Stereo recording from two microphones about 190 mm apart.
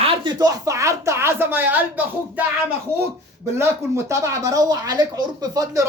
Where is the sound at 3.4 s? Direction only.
15° right (ahead or behind).